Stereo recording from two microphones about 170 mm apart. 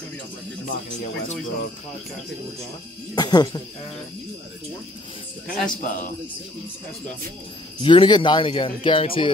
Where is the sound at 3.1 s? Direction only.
25° left (ahead or behind).